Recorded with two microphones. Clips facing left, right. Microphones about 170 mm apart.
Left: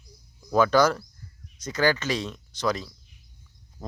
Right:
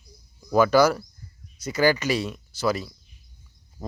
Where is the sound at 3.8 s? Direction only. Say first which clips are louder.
Right 3 dB; centre (ahead or behind).